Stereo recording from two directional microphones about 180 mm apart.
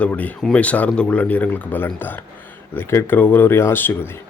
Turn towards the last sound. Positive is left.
turn(degrees=10)  # may be behind; listen again after turning